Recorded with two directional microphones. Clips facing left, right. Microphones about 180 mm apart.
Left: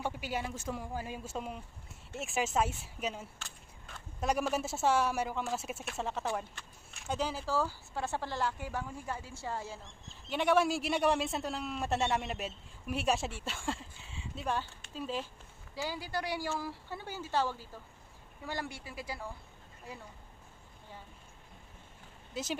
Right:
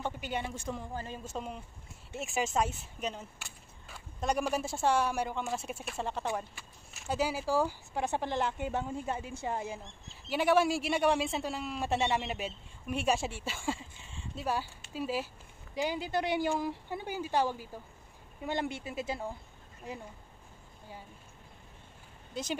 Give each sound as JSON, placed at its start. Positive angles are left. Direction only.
{"t": 0.0, "sound": "speech", "side_deg": 5}
{"t": 3.3, "sound": "a sound", "side_deg": -10}
{"t": 4.2, "sound": "speech", "side_deg": 5}
{"t": 10.3, "sound": "a woman's voice", "side_deg": 0}
{"t": 22.3, "sound": "speech", "side_deg": 5}